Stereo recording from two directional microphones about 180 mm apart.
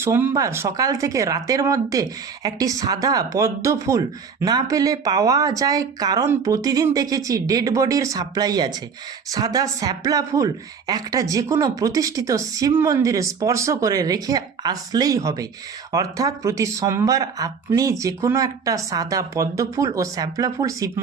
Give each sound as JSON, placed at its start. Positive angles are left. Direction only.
{"t": 0.0, "sound": "speech", "side_deg": -15}